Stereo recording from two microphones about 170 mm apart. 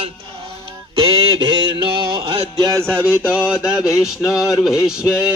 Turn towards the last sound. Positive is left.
turn(degrees=-5)  # may be behind; listen again after turning